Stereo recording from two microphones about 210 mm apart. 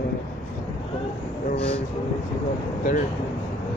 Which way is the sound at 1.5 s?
25° left (ahead or behind).